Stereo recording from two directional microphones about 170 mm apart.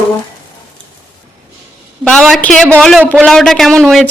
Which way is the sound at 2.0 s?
5° left (ahead or behind).